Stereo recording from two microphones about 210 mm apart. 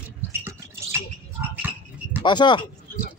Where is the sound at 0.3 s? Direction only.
10° right (ahead or behind).